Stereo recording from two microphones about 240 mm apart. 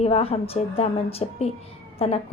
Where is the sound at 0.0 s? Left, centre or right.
Left.